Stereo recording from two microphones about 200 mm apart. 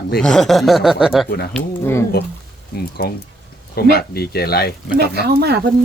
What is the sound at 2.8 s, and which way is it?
Speech, 50° left (ahead or behind).